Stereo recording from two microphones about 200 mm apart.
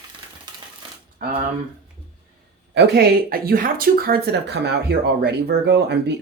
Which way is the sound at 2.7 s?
55° right (ahead or behind).